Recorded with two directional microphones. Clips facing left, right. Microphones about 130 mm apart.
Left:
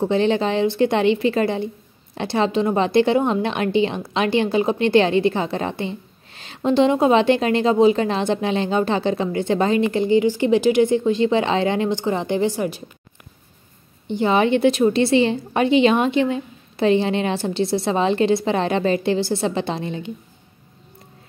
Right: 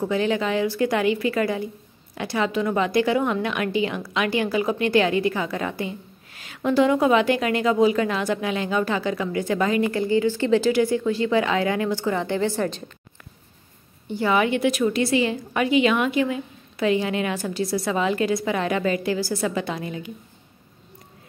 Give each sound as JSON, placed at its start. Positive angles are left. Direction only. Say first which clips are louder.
{"t": 0.0, "sound": "a woman's voice", "louder": "left 4 dB", "side_deg": 25}
{"t": 14.0, "sound": "a woman's voice", "louder": "left 3 dB", "side_deg": 20}